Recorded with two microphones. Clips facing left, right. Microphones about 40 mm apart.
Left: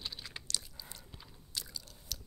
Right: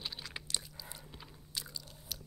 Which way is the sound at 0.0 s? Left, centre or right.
Centre.